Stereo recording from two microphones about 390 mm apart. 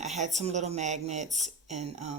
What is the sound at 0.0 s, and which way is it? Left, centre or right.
Speech, centre.